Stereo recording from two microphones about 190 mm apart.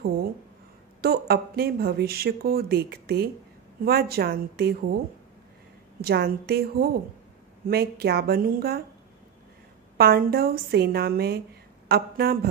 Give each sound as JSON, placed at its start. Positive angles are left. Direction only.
{"t": 1.0, "sound": "speech", "side_deg": -55}
{"t": 5.9, "sound": "speech", "side_deg": -55}
{"t": 9.9, "sound": "a woman's voice", "side_deg": -55}